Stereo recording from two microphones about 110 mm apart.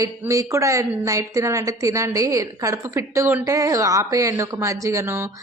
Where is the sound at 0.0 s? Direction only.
30° right (ahead or behind).